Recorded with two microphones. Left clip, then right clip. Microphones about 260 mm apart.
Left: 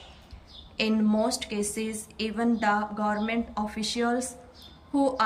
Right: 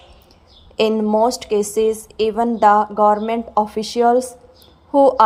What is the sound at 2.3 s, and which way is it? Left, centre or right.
Speech, right.